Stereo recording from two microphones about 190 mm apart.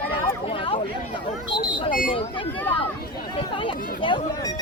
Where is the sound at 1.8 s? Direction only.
45° left (ahead or behind).